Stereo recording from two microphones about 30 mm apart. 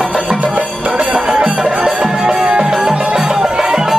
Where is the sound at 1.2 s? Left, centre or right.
Right.